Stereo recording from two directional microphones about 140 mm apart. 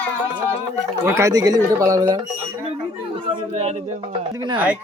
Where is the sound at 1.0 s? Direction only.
20° right (ahead or behind).